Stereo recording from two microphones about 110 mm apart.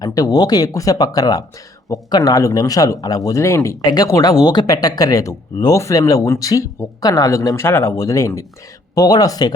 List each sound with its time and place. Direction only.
0.0 s speech: 35° left (ahead or behind)